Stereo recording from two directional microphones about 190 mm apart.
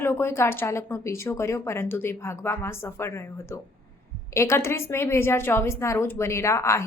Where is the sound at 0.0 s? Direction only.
10° left (ahead or behind).